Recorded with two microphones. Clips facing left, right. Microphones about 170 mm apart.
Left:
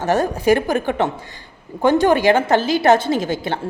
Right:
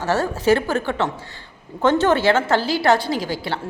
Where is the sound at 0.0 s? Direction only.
15° left (ahead or behind).